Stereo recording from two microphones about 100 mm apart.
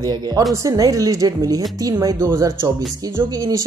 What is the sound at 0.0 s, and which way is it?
Speech, 40° right (ahead or behind).